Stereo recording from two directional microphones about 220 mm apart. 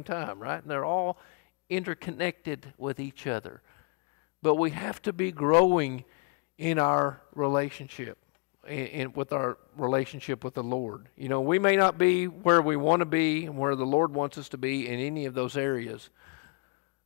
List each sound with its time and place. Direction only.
0.0 s speech: 15° left (ahead or behind)